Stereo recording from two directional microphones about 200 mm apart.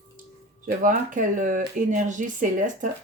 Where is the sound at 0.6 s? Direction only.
40° right (ahead or behind).